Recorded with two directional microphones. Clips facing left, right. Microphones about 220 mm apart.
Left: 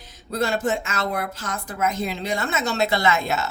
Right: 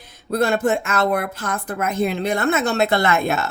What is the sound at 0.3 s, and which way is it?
Speech, 55° right (ahead or behind).